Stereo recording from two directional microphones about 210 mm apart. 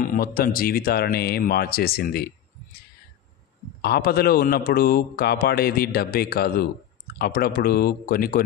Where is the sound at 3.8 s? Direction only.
50° left (ahead or behind).